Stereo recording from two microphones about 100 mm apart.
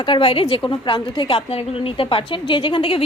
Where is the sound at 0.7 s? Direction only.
55° left (ahead or behind).